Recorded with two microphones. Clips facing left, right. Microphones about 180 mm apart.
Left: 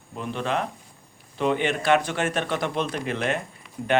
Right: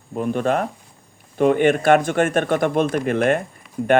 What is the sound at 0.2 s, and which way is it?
Speech, 50° right (ahead or behind).